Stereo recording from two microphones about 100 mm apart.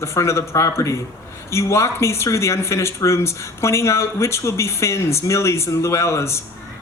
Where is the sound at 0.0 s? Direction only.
30° left (ahead or behind).